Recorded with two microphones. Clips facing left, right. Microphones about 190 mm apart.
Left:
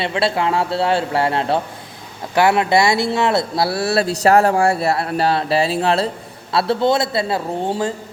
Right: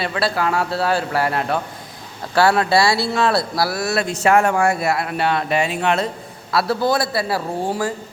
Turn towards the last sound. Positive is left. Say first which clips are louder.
# left 1 dB
turn(degrees=25)  # may be behind; listen again after turning